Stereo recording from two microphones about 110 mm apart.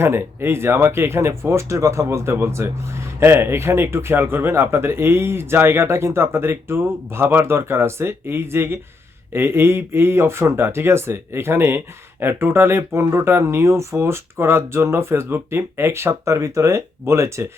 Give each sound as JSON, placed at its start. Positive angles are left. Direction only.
{"t": 0.0, "sound": "speech", "side_deg": -20}